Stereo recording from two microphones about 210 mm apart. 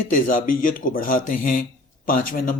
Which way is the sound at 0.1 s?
40° left (ahead or behind).